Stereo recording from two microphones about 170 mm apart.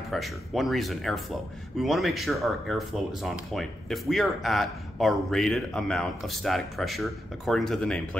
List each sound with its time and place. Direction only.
0.1 s speech: centre (ahead or behind)